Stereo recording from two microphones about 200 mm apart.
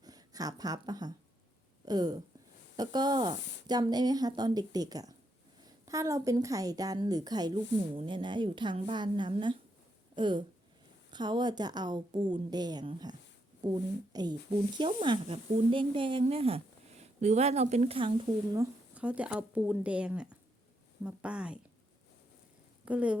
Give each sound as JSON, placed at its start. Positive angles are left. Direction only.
{"t": 0.0, "sound": "a woman's voice", "side_deg": -20}
{"t": 18.5, "sound": "speech", "side_deg": -10}
{"t": 22.9, "sound": "speech", "side_deg": -5}